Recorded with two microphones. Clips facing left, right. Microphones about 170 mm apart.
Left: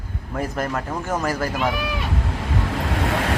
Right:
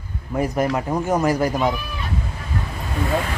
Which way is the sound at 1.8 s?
85° left.